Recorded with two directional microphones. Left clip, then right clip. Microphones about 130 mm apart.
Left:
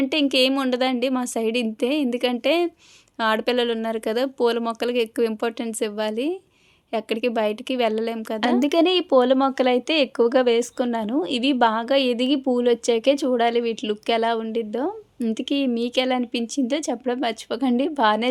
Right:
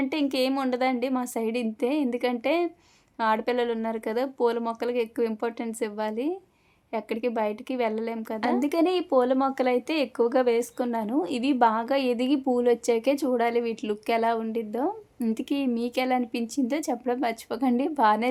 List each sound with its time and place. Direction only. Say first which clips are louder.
0.0 s speech: left 6 dB; 30° left (ahead or behind)
8.4 s speech: left 5 dB; 35° left (ahead or behind); by 18.3 s 20° left (ahead or behind)